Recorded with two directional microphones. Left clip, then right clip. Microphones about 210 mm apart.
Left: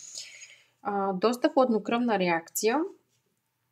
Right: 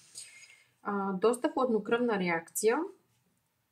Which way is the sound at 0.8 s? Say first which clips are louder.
Left 3 dB; 45° left (ahead or behind).